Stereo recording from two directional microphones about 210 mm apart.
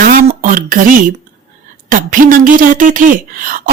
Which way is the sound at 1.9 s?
40° right (ahead or behind).